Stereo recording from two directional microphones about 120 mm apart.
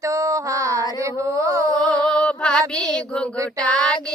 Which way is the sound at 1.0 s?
25° right (ahead or behind).